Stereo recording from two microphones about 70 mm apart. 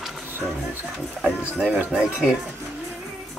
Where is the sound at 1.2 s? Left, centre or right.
Centre.